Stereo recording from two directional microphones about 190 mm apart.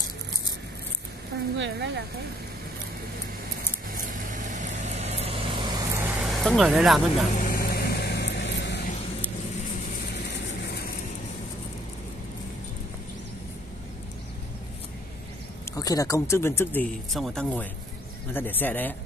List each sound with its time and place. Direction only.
1.6 s speech: 65° right (ahead or behind)
3.9 s vehicle: 45° right (ahead or behind); by 6.0 s 20° right (ahead or behind)
6.1 s speech: centre (ahead or behind)
7.2 s vehicle: 45° left (ahead or behind); by 8.8 s 65° left (ahead or behind)
15.7 s speech: 20° left (ahead or behind)
17.1 s speech: centre (ahead or behind)